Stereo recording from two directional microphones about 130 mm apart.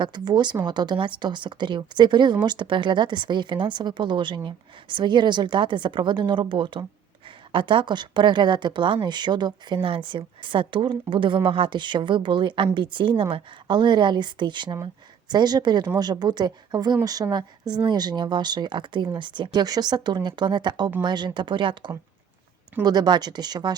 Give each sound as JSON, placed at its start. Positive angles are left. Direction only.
{"t": 0.0, "sound": "a woman's voice", "side_deg": -35}